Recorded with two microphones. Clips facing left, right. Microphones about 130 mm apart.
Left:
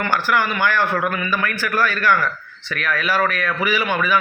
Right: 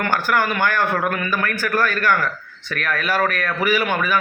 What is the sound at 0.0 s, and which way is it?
A man's voice, 45° right (ahead or behind).